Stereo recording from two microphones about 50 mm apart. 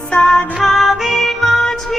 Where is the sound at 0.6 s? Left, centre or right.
Centre.